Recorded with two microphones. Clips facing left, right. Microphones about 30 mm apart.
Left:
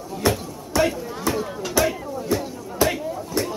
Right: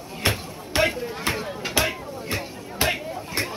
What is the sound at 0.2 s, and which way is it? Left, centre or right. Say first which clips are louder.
Music: left 3 dB; right.